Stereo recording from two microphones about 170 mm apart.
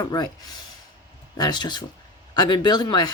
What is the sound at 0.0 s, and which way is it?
Speech, 25° left (ahead or behind).